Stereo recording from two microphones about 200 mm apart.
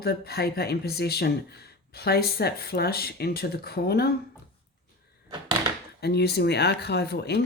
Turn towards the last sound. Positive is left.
turn(degrees=55)  # may be behind; listen again after turning